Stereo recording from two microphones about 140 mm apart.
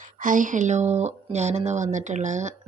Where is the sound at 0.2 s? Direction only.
70° right (ahead or behind).